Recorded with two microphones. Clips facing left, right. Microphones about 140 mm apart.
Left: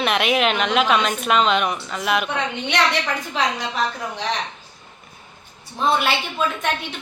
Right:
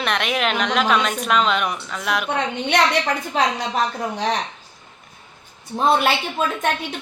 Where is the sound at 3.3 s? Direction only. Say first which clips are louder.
Right 3 dB; 40° right (ahead or behind).